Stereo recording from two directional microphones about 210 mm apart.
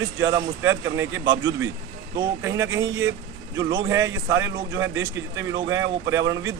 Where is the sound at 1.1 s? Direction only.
65° right (ahead or behind).